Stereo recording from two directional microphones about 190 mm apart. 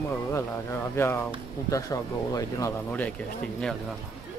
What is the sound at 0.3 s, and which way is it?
Speech, 15° left (ahead or behind).